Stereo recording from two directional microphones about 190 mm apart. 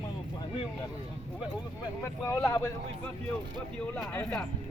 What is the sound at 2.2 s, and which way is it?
Speech, 15° left (ahead or behind).